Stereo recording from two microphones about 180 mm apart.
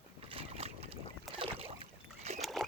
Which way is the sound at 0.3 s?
35° right (ahead or behind).